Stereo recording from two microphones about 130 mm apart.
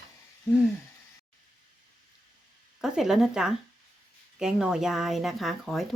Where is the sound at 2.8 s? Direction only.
5° right (ahead or behind).